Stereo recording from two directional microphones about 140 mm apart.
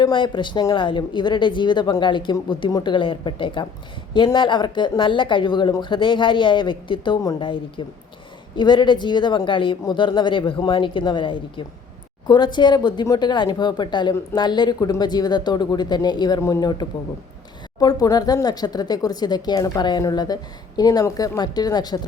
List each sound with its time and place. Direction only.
0.0 s speech: 35° left (ahead or behind)